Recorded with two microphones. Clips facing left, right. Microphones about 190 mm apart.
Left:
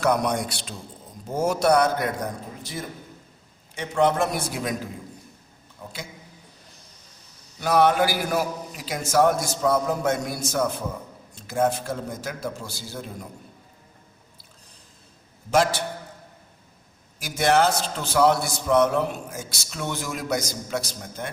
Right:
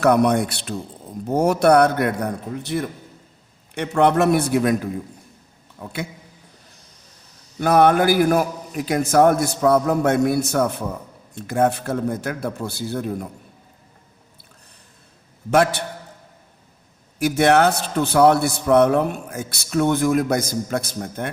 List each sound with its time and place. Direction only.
0.0 s a man's voice: 60° right (ahead or behind)
7.6 s a man's voice: 55° right (ahead or behind)
15.4 s a man's voice: 60° right (ahead or behind)
17.2 s a man's voice: 60° right (ahead or behind)